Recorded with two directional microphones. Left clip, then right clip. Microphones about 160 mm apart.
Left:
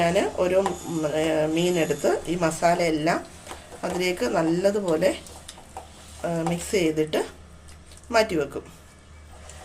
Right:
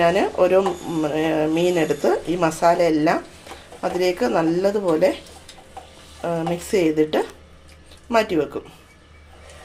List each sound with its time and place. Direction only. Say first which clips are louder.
0.0 s speech: right 5 dB; 35° right (ahead or behind)
6.2 s speech: right 3 dB; 35° right (ahead or behind)